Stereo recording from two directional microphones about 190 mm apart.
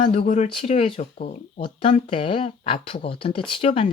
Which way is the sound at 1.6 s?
25° left (ahead or behind).